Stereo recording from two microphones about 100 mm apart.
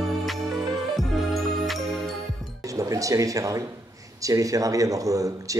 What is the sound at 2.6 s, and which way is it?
Speech, 35° right (ahead or behind).